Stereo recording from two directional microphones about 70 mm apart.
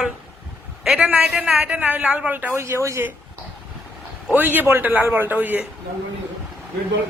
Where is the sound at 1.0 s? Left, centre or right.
Right.